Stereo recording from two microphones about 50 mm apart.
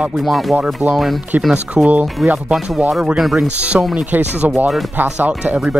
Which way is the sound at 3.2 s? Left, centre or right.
Centre.